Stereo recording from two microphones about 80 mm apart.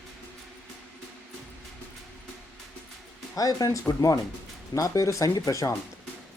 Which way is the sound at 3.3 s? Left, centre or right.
Left.